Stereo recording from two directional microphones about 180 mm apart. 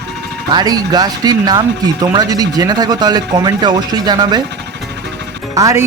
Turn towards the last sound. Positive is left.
turn(degrees=-15)  # may be behind; listen again after turning